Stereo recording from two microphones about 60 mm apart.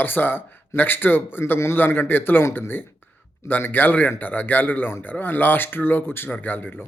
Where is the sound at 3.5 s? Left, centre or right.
Left.